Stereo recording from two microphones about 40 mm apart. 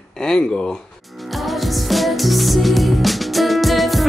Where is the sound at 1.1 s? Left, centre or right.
Centre.